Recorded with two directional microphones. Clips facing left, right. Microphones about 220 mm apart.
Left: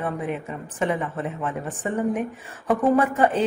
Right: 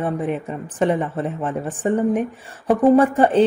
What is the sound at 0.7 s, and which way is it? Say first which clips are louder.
Speech: right 5 dB; 30° right (ahead or behind).